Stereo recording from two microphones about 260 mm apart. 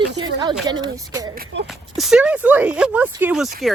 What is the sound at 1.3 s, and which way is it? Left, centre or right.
Speech, right.